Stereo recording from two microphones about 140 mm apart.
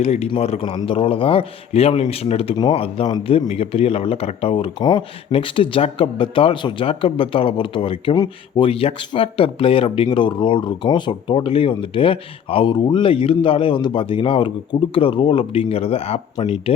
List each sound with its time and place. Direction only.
0.0 s a man's voice: 55° left (ahead or behind); by 8.1 s 40° left (ahead or behind)
8.1 s speech: 25° left (ahead or behind)
8.6 s a man's voice: 45° left (ahead or behind)